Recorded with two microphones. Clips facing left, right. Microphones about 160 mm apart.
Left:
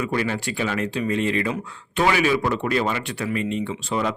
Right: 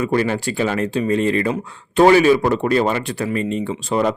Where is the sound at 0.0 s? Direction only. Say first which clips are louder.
Right 6 dB; 40° right (ahead or behind).